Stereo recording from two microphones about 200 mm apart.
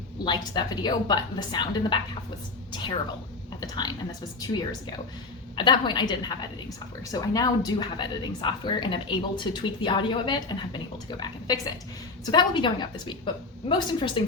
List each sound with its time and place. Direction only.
0.3 s a woman's voice: 20° left (ahead or behind)
3.6 s a woman's voice: 20° left (ahead or behind)
5.5 s a woman's voice: 25° left (ahead or behind)